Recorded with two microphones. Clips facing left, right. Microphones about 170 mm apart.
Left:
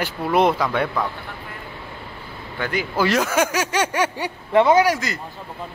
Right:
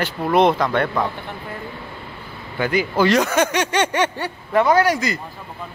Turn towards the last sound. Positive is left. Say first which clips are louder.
# right 2 dB
turn(degrees=0)  # may be behind; listen again after turning